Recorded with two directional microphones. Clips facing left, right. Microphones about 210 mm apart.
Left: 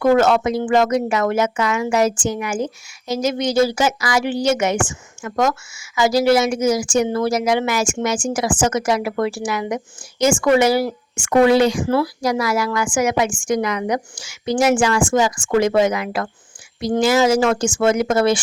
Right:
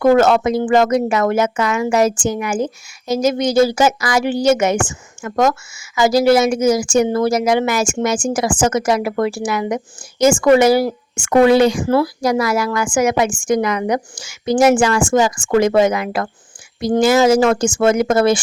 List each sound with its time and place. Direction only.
0.0 s speech: 45° right (ahead or behind)